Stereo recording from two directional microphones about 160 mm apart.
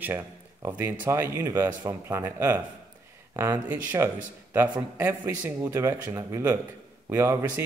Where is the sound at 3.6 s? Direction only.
10° right (ahead or behind).